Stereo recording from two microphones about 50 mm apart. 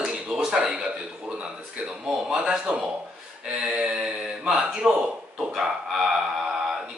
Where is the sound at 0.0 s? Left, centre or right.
Centre.